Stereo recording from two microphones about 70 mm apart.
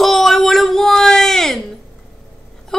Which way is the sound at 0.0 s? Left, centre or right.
Centre.